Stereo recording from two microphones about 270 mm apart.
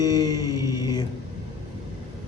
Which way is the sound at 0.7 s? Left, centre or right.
Centre.